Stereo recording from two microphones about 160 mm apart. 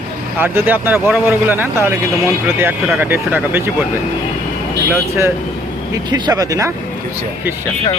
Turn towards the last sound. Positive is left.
turn(degrees=-20)  # may be behind; listen again after turning